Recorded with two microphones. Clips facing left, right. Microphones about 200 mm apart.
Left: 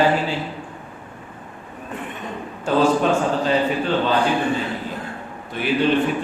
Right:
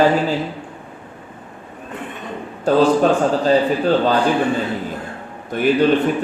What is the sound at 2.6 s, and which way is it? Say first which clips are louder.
A man's voice: right 4 dB; 40° right (ahead or behind).